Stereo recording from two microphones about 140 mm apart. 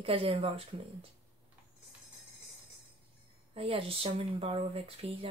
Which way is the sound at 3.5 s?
40° right (ahead or behind).